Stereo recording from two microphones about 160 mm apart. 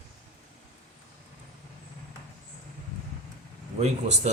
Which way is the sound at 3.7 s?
40° right (ahead or behind).